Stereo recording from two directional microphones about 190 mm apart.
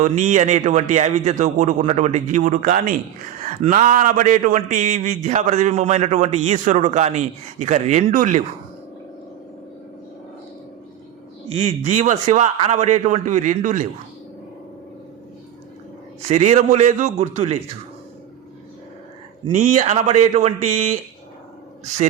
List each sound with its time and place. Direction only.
0.0 s a man's voice: 40° right (ahead or behind)
11.5 s a man's voice: 35° right (ahead or behind)
16.3 s a man's voice: 35° right (ahead or behind)
19.5 s a man's voice: 40° right (ahead or behind)